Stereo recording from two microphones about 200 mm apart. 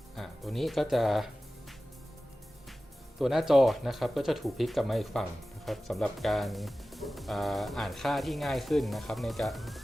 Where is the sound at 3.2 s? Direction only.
Centre (ahead or behind).